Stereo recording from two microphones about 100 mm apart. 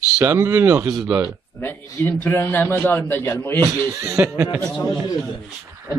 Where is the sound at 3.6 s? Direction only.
35° right (ahead or behind).